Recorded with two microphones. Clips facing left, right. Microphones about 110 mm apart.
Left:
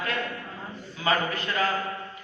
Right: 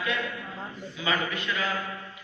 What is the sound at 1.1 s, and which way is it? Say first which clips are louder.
Mantra: left 3 dB; 40° left (ahead or behind).